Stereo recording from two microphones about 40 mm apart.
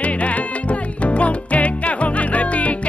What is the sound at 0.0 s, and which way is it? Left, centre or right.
Music, left.